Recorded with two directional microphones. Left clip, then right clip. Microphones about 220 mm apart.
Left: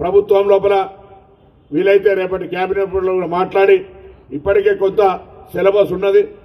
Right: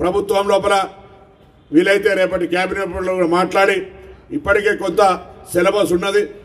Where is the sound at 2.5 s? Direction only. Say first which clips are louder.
Left 2 dB; 25° left (ahead or behind).